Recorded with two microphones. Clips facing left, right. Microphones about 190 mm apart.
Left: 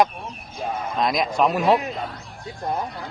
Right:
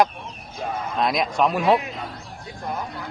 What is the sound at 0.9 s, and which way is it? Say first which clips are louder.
Speech: even; centre (ahead or behind).